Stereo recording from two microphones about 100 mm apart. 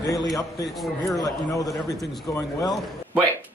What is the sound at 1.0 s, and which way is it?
Speech, 35° left (ahead or behind).